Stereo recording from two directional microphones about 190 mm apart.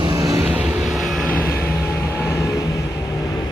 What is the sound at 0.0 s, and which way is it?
Vehicle, 20° right (ahead or behind).